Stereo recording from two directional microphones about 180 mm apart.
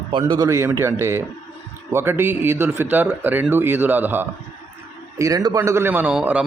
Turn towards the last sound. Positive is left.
turn(degrees=-5)  # may be behind; listen again after turning